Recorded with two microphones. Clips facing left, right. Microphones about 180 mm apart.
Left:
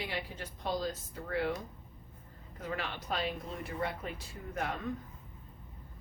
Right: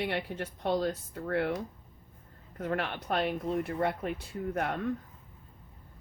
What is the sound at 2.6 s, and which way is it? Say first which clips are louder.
Speech: right 6 dB; 60° right (ahead or behind).